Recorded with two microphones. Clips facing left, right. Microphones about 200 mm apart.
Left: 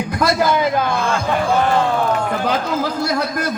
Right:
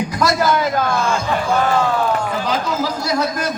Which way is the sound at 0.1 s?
55° left (ahead or behind).